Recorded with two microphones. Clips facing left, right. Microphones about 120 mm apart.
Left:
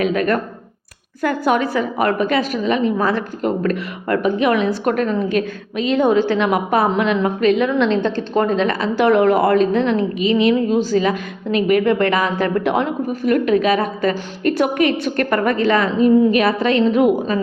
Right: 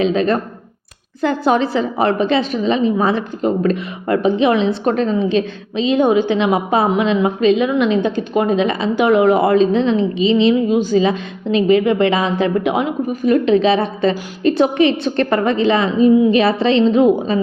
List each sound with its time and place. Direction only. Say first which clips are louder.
0.0 s a woman's voice: right 2 dB; 25° right (ahead or behind)